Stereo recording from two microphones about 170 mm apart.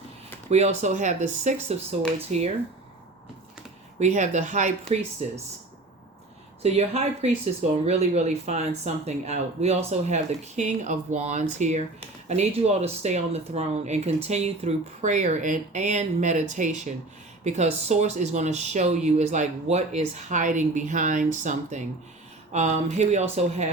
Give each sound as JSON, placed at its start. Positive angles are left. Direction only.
{"t": 0.5, "sound": "speech", "side_deg": -40}
{"t": 4.0, "sound": "speech", "side_deg": -45}
{"t": 6.6, "sound": "speech", "side_deg": -40}